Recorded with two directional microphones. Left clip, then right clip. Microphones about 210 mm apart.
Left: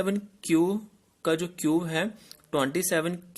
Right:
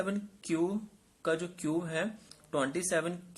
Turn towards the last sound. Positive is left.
turn(degrees=45)  # may be behind; listen again after turning